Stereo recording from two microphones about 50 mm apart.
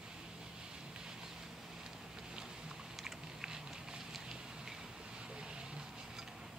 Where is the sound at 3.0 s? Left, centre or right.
Centre.